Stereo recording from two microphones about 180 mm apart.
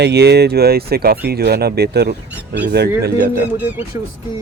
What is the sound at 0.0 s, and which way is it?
Speech, 65° right (ahead or behind).